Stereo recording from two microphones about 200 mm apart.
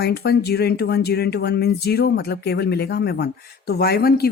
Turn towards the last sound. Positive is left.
turn(degrees=50)  # may be behind; listen again after turning